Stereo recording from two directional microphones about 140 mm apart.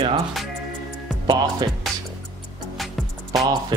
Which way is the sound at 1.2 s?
25° right (ahead or behind).